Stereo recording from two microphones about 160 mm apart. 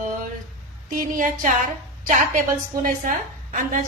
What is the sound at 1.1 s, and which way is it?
A woman's voice, 55° right (ahead or behind).